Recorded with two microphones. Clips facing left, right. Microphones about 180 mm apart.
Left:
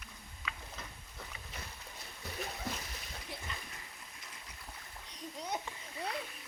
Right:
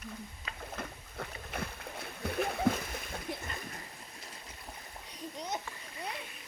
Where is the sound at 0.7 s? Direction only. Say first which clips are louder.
Right 8 dB; 60° right (ahead or behind).